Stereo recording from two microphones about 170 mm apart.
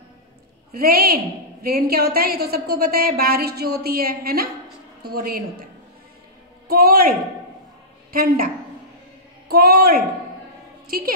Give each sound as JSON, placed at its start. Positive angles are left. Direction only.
{"t": 0.7, "sound": "a woman's voice", "side_deg": -60}
{"t": 6.7, "sound": "a woman's voice", "side_deg": -60}
{"t": 9.5, "sound": "a woman's voice", "side_deg": -65}